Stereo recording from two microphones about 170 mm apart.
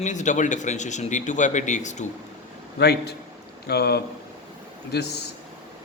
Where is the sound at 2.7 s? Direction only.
70° left (ahead or behind).